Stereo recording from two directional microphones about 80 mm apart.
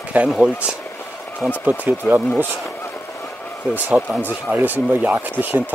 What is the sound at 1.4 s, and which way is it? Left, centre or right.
Speech, right.